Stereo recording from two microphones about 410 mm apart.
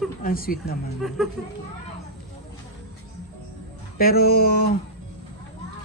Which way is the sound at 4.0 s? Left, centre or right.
Left.